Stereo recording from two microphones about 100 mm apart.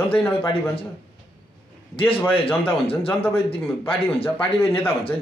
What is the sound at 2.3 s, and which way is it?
Speech, 65° left (ahead or behind).